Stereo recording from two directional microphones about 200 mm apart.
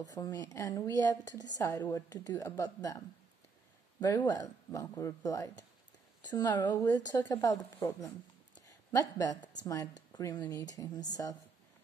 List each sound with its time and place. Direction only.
0.0 s a woman's voice: 20° left (ahead or behind)
4.0 s a woman's voice: 15° left (ahead or behind)
8.5 s a sound: 20° left (ahead or behind)
9.6 s speech: 20° left (ahead or behind)